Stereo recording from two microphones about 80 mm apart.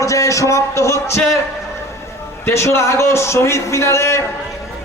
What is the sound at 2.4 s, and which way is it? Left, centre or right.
A man's voice, left.